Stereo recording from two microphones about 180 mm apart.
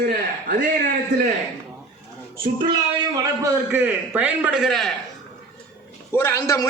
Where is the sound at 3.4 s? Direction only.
10° right (ahead or behind).